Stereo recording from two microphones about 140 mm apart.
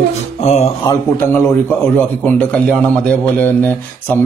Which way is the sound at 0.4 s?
50° left (ahead or behind).